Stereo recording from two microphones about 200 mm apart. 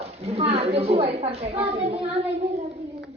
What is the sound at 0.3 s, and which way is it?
A man's voice, 30° right (ahead or behind).